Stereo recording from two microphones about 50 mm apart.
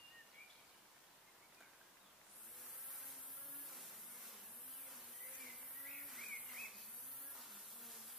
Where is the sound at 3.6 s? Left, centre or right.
Centre.